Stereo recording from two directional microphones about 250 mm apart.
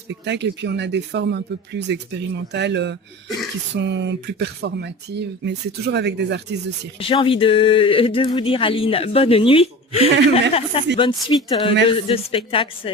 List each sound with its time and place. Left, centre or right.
0.1 s speech: right
7.0 s speech: left